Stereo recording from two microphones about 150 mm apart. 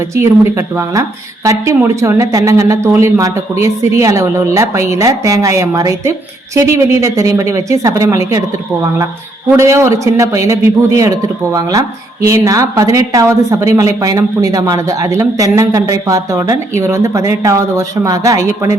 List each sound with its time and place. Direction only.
0.1 s a woman's voice: 20° right (ahead or behind)
9.5 s a woman's voice: 20° right (ahead or behind)